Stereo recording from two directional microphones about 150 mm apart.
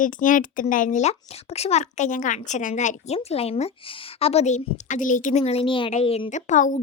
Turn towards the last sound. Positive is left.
turn(degrees=55)  # may be behind; listen again after turning